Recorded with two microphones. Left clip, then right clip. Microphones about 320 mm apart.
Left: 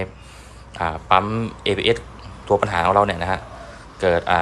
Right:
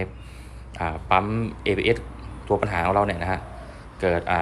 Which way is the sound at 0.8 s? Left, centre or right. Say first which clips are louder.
Left 4 dB; centre.